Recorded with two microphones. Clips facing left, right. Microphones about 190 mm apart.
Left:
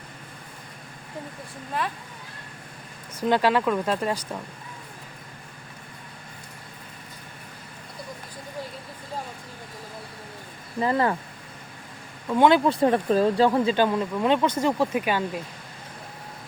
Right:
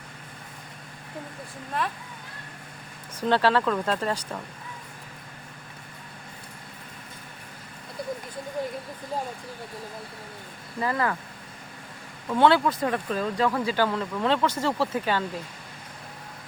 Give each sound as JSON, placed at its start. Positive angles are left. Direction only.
{"t": 1.8, "sound": "speech", "side_deg": 0}
{"t": 3.2, "sound": "speech", "side_deg": 15}
{"t": 10.8, "sound": "speech", "side_deg": 25}
{"t": 12.3, "sound": "speech", "side_deg": 15}
{"t": 12.7, "sound": "speech", "side_deg": 30}